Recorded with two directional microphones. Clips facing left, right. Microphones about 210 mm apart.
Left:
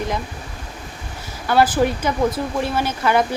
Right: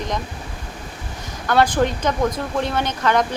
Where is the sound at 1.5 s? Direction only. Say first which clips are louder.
Left 1 dB; 5° left (ahead or behind).